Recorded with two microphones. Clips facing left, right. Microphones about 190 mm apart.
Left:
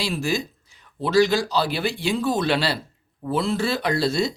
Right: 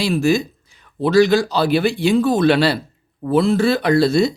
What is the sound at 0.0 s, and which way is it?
Speech, 55° right (ahead or behind).